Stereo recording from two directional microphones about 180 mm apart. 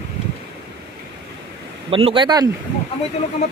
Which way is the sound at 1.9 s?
30° right (ahead or behind).